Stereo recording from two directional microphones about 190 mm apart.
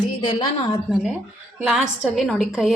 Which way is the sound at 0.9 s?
5° right (ahead or behind).